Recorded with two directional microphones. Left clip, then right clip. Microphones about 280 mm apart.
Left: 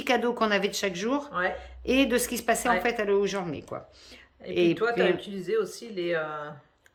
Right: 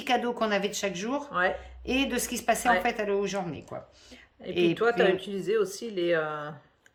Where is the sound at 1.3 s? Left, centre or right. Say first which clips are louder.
Right 2 dB; right.